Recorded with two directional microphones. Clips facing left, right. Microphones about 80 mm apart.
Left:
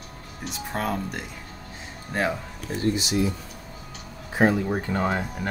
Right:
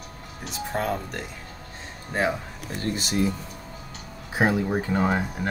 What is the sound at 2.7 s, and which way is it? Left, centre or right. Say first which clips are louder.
Speech: left 3 dB; right.